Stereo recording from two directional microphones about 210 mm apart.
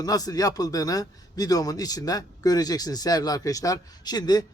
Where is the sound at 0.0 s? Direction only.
15° left (ahead or behind).